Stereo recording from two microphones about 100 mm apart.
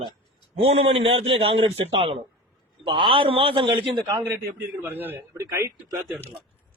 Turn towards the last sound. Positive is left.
turn(degrees=-30)  # may be behind; listen again after turning